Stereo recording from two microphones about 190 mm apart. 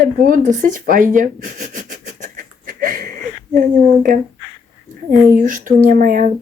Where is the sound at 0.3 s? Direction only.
45° right (ahead or behind).